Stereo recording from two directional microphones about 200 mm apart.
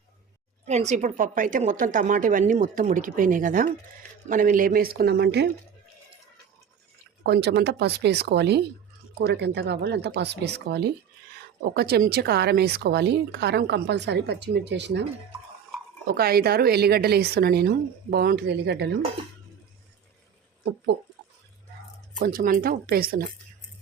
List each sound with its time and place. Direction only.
0.6 s a woman's voice: 35° right (ahead or behind); by 5.5 s 55° right (ahead or behind)
7.3 s a woman's voice: 55° right (ahead or behind)
16.0 s a woman's voice: 50° right (ahead or behind)
22.2 s a woman's voice: 45° right (ahead or behind)